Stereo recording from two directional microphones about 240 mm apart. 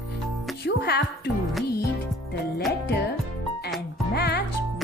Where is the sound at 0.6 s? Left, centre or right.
Left.